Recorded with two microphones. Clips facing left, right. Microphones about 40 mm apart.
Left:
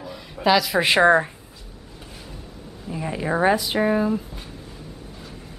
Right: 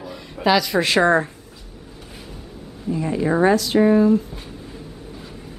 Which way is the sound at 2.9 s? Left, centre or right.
Centre.